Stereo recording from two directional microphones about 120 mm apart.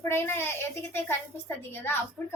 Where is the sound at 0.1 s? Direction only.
20° left (ahead or behind).